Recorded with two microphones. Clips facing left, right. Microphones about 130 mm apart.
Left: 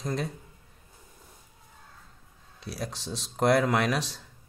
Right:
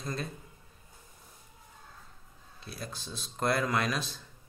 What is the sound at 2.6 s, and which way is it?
Speech, 75° left (ahead or behind).